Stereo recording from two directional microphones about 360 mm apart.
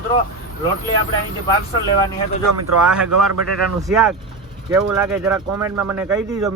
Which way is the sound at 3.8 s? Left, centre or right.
Centre.